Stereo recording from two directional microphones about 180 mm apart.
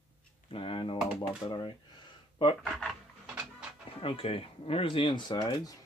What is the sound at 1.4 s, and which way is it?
Speech, 10° left (ahead or behind).